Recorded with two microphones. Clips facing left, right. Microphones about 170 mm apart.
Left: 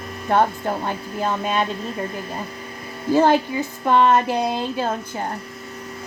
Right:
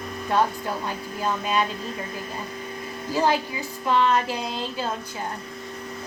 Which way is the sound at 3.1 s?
55° left (ahead or behind).